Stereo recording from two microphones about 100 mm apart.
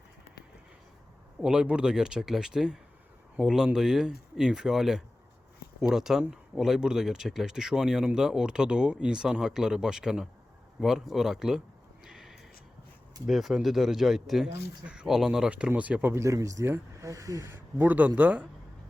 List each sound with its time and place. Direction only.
1.4 s speech: 10° right (ahead or behind)
12.0 s a sound: 5° right (ahead or behind)
13.2 s speech: 5° right (ahead or behind)
16.1 s speech: 30° right (ahead or behind)
17.7 s speech: 15° right (ahead or behind)